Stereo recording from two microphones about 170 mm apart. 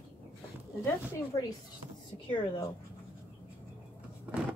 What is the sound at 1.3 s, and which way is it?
Speech, 20° left (ahead or behind).